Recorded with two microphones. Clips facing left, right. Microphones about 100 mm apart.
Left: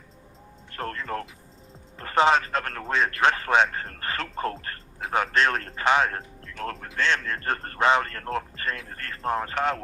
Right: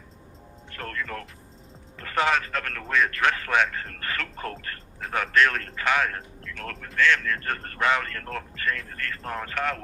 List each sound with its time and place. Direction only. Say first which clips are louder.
0.7 s speech: left 3 dB; 35° left (ahead or behind)